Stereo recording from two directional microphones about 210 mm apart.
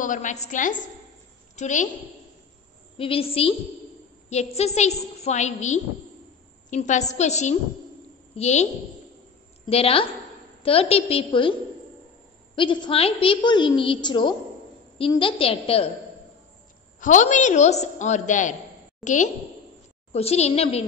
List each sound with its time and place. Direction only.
0.0 s a woman's voice: 35° left (ahead or behind)
3.0 s a woman's voice: 25° left (ahead or behind)
9.7 s a woman's voice: 25° left (ahead or behind)
12.5 s a woman's voice: 25° left (ahead or behind)
17.0 s a woman's voice: 35° left (ahead or behind)
20.1 s a woman's voice: 30° left (ahead or behind)